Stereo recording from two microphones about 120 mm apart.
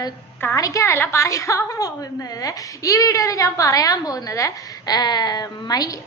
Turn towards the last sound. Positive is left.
turn(degrees=30)  # may be behind; listen again after turning